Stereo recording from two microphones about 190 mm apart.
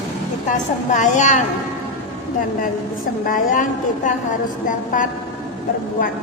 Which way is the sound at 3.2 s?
45° left (ahead or behind).